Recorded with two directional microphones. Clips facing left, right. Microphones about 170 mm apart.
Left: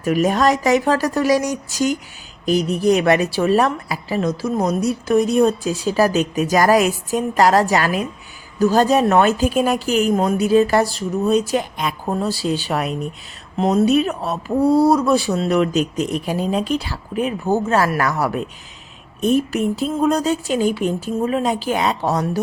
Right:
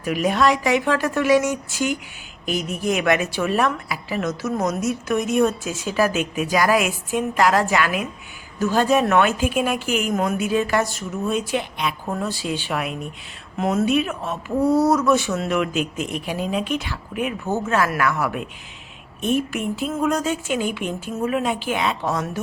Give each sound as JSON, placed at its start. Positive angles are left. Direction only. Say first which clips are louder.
{"t": 0.0, "sound": "a woman's voice", "louder": "left 3 dB", "side_deg": 45}